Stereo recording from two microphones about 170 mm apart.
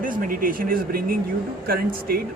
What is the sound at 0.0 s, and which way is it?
A man's voice, 55° right (ahead or behind).